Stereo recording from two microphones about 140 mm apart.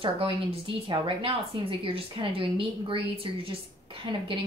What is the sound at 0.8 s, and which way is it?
Speech, 40° right (ahead or behind).